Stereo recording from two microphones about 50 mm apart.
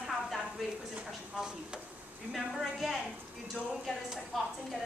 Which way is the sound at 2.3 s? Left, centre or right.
Centre.